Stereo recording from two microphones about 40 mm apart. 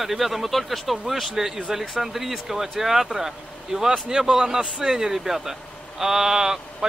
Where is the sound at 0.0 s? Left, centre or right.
Centre.